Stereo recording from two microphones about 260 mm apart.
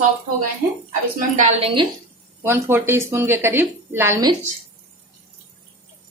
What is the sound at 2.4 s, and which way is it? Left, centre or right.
A woman's voice, centre.